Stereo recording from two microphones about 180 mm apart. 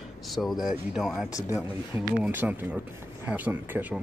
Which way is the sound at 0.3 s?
Centre (ahead or behind).